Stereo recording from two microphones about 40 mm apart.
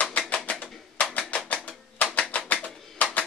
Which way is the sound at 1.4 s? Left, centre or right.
Left.